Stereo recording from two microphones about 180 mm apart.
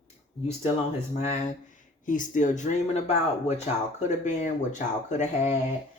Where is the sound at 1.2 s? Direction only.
40° left (ahead or behind).